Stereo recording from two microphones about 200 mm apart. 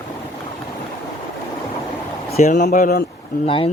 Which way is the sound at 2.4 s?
35° left (ahead or behind).